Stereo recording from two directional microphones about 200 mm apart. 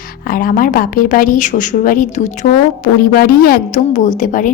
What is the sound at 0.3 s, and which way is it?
A woman's voice, 45° left (ahead or behind).